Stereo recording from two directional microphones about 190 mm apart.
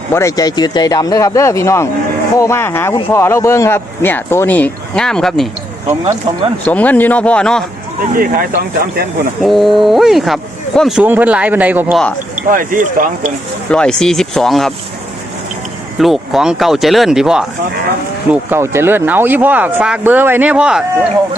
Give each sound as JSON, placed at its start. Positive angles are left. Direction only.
{"t": 0.1, "sound": "speech", "side_deg": 15}
{"t": 6.7, "sound": "speech", "side_deg": 10}
{"t": 8.1, "sound": "speech", "side_deg": -50}
{"t": 9.4, "sound": "speech", "side_deg": 0}
{"t": 12.5, "sound": "speech", "side_deg": -45}
{"t": 13.7, "sound": "speech", "side_deg": 5}
{"t": 16.0, "sound": "speech", "side_deg": 0}